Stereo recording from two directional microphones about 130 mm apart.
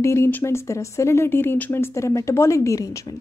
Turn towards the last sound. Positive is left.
turn(degrees=25)  # may be behind; listen again after turning